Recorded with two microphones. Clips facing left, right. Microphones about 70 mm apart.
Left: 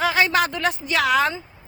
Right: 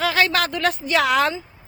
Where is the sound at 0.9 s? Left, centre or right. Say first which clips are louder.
Right 1 dB; centre.